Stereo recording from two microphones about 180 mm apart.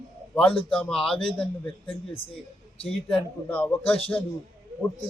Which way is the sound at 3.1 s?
10° left (ahead or behind).